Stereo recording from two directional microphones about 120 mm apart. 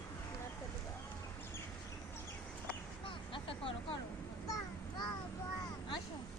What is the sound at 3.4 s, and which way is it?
Speech, 50° left (ahead or behind).